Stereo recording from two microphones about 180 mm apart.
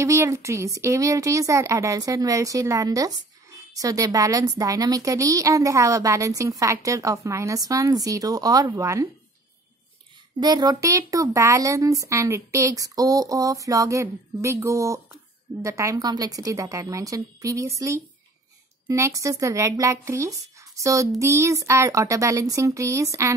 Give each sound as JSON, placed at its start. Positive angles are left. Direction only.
{"t": 0.0, "sound": "a woman's voice", "side_deg": -15}
{"t": 10.4, "sound": "speech", "side_deg": -20}